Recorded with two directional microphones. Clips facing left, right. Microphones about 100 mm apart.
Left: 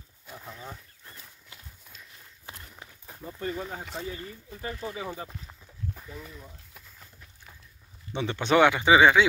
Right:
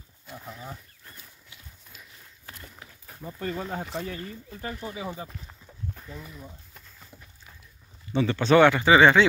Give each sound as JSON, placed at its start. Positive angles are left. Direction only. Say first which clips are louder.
{"t": 0.5, "sound": "speech", "louder": "right 2 dB", "side_deg": -5}
{"t": 3.2, "sound": "speech", "louder": "right 1 dB", "side_deg": -10}
{"t": 4.1, "sound": "speech", "louder": "right 2 dB", "side_deg": 15}
{"t": 4.9, "sound": "speech", "louder": "right 1 dB", "side_deg": -20}
{"t": 5.3, "sound": "a sound", "louder": "right 1 dB", "side_deg": 5}
{"t": 8.1, "sound": "speech", "louder": "right 4 dB", "side_deg": 20}